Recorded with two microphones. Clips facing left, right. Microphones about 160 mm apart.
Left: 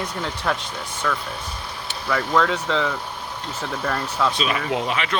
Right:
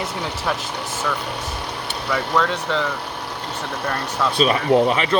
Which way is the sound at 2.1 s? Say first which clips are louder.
Left 1 dB; 5° right (ahead or behind).